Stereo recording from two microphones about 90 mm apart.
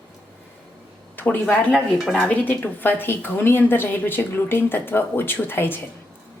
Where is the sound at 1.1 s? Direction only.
20° left (ahead or behind).